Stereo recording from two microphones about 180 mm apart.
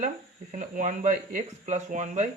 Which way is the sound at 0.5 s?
45° right (ahead or behind).